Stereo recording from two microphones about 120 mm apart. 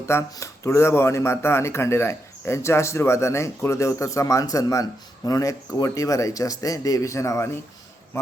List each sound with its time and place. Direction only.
0.0 s speech: 25° left (ahead or behind)